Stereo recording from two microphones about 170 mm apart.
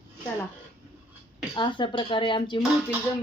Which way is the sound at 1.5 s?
30° left (ahead or behind).